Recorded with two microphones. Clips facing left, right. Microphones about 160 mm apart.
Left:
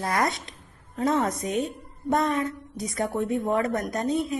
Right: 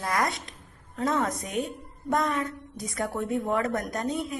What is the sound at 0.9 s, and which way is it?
A woman's voice, 20° left (ahead or behind).